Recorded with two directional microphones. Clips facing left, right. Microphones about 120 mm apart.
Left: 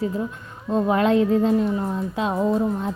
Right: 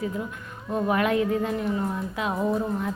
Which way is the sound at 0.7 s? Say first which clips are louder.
Left 5 dB; 25° left (ahead or behind).